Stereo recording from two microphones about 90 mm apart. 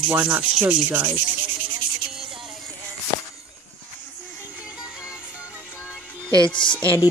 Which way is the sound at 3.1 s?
50° left (ahead or behind).